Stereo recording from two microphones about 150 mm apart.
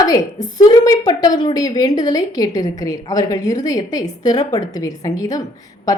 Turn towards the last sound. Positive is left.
turn(degrees=25)  # may be behind; listen again after turning